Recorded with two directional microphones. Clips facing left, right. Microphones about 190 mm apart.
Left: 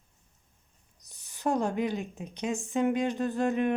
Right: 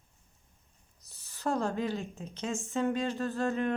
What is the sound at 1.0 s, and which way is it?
A woman's voice, 15° left (ahead or behind).